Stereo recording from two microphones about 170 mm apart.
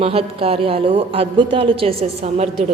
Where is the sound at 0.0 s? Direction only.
35° right (ahead or behind).